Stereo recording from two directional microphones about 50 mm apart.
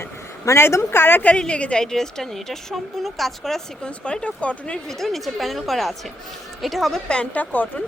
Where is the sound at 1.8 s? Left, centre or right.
Centre.